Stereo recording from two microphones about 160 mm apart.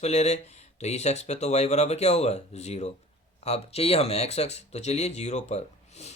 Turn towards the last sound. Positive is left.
turn(degrees=45)  # may be behind; listen again after turning